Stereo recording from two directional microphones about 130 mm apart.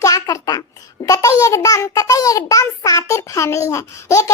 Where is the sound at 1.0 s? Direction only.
25° left (ahead or behind).